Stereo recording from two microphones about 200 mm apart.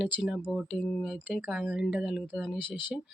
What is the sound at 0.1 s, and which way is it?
Speech, 5° right (ahead or behind).